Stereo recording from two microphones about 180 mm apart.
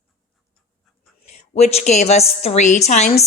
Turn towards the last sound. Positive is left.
turn(degrees=40)  # may be behind; listen again after turning